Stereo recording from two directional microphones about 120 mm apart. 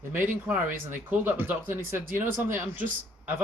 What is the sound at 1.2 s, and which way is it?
Speech, 20° right (ahead or behind).